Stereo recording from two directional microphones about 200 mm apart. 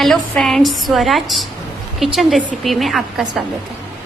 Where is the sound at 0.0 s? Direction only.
Centre (ahead or behind).